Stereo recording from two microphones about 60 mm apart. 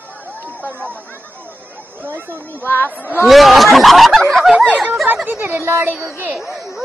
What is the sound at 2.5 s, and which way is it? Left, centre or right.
Speech, left.